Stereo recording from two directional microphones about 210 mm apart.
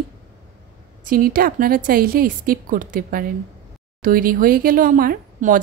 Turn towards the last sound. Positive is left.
turn(degrees=-40)  # may be behind; listen again after turning